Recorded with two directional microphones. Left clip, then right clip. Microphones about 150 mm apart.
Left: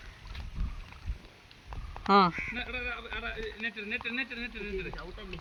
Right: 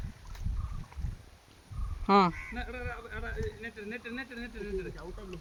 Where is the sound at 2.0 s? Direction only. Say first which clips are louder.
Left 1 dB; 10° right (ahead or behind).